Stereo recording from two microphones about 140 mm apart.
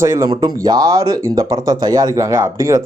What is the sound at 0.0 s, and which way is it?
Speech, 20° right (ahead or behind).